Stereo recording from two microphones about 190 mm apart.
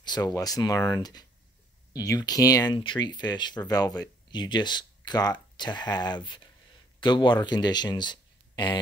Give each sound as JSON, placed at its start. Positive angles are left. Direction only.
{"t": 0.0, "sound": "speech", "side_deg": 20}